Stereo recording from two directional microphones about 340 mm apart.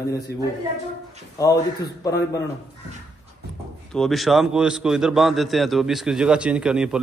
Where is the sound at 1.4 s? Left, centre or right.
Centre.